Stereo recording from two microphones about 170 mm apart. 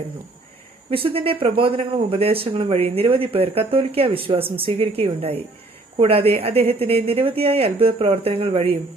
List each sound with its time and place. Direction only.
0.9 s speech: 30° right (ahead or behind)